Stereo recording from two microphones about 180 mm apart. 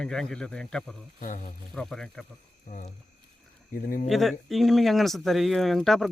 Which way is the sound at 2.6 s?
40° left (ahead or behind).